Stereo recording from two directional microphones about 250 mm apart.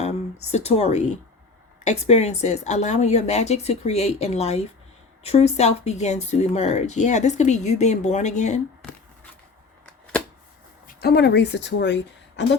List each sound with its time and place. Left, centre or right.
0.0 s speech: left
10.8 s a woman's voice: left